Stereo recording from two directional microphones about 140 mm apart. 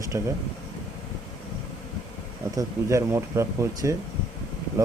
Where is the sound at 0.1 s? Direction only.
25° right (ahead or behind).